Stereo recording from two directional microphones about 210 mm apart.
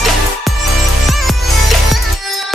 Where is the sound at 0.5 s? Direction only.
Centre (ahead or behind).